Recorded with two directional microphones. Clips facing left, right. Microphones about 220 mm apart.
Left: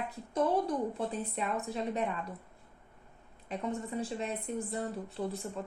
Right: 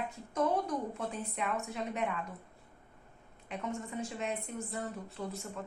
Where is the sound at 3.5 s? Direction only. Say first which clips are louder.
Left 3 dB; 35° left (ahead or behind).